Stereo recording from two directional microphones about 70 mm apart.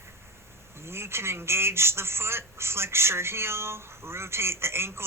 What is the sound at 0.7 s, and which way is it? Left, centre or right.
Speech, right.